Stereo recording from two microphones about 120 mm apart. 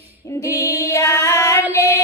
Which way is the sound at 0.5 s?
25° left (ahead or behind).